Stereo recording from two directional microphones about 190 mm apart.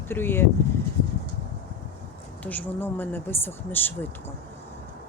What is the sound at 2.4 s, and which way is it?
Speech, 10° left (ahead or behind).